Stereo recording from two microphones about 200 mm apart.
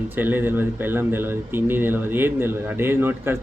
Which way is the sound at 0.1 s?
10° right (ahead or behind).